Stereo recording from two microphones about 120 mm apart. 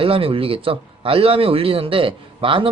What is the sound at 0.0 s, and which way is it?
A man's voice, 50° right (ahead or behind).